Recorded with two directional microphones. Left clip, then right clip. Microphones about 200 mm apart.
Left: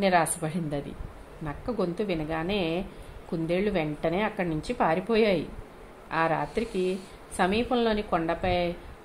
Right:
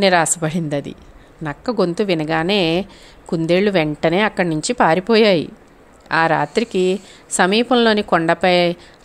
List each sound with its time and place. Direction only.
0.0 s a woman's voice: 25° right (ahead or behind)